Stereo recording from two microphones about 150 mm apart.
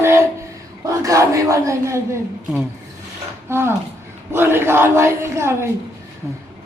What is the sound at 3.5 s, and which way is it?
A woman's voice, 15° right (ahead or behind).